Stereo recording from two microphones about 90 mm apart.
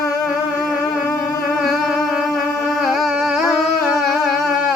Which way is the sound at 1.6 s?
Centre (ahead or behind).